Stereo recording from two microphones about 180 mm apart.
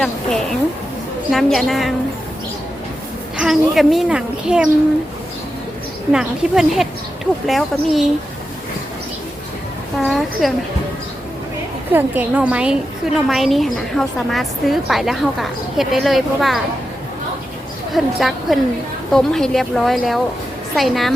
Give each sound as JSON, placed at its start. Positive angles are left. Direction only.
{"t": 0.0, "sound": "a woman's voice", "side_deg": 0}
{"t": 3.3, "sound": "a woman's voice", "side_deg": 0}
{"t": 6.1, "sound": "a woman's voice", "side_deg": -5}
{"t": 10.1, "sound": "a woman's voice", "side_deg": 0}
{"t": 11.9, "sound": "a woman's voice", "side_deg": -10}
{"t": 17.9, "sound": "a woman's voice", "side_deg": 0}